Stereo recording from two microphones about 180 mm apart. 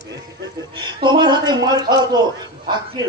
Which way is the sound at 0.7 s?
25° right (ahead or behind).